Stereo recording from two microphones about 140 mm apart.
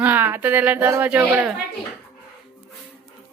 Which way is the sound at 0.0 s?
15° right (ahead or behind).